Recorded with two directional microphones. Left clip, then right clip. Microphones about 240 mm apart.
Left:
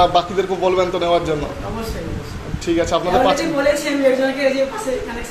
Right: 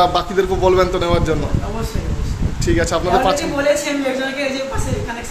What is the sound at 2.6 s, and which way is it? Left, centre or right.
Speech, right.